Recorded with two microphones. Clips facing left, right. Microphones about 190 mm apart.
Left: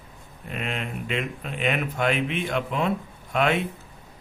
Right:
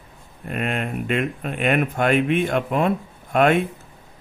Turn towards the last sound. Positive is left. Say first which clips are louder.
# right 6 dB
turn(degrees=-50)  # may be behind; listen again after turning